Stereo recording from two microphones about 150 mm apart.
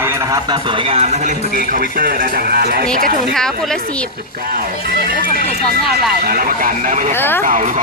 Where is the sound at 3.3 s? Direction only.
5° left (ahead or behind).